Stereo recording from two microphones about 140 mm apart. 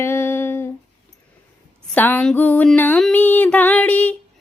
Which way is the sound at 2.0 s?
10° left (ahead or behind).